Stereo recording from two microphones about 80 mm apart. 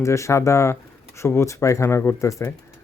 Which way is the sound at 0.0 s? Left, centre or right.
Left.